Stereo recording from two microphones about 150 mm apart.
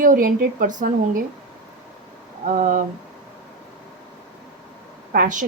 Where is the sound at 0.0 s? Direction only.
65° right (ahead or behind).